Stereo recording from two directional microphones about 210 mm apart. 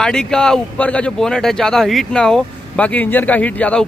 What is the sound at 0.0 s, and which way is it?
Speech, 5° left (ahead or behind).